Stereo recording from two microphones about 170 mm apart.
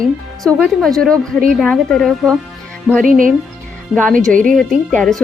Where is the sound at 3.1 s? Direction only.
55° right (ahead or behind).